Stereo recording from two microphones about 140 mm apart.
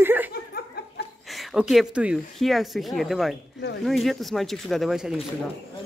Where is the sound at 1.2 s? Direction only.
Centre (ahead or behind).